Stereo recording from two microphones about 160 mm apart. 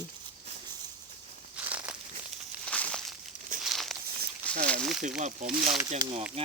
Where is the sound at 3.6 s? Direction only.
Centre (ahead or behind).